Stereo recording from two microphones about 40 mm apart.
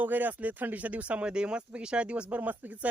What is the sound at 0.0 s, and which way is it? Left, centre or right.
Speech, right.